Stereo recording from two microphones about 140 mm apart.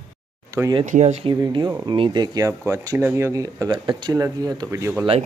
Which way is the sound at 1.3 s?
30° right (ahead or behind).